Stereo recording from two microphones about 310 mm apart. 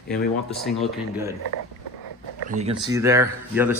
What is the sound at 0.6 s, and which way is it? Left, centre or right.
Speech, centre.